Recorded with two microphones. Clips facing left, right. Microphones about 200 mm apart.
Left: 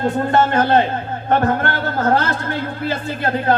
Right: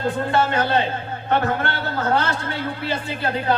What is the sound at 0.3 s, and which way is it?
A man's voice, 45° left (ahead or behind).